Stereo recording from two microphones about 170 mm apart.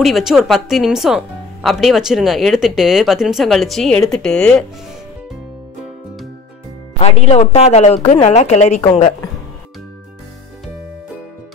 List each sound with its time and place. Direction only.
0.0 s speech: centre (ahead or behind)
7.0 s a woman's voice: 35° left (ahead or behind)